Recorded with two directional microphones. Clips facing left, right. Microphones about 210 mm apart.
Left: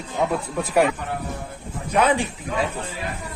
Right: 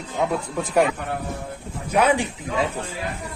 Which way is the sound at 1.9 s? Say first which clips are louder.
Even; 10° right (ahead or behind).